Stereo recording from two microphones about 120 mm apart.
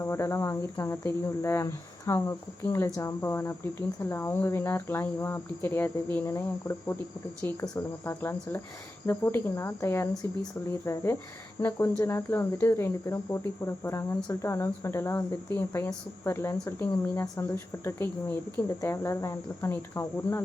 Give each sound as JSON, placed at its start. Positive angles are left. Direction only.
{"t": 0.0, "sound": "speech", "side_deg": 25}